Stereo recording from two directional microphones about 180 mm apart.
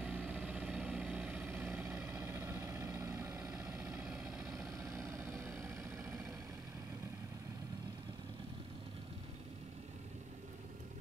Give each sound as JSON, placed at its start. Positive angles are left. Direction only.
{"t": 0.0, "sound": "vehicle", "side_deg": -5}
{"t": 4.0, "sound": "vehicle", "side_deg": -5}
{"t": 4.6, "sound": "vehicle", "side_deg": -15}